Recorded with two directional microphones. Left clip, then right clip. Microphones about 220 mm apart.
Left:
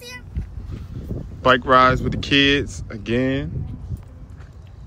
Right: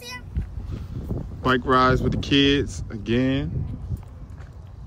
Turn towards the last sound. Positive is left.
turn(degrees=-15)  # may be behind; listen again after turning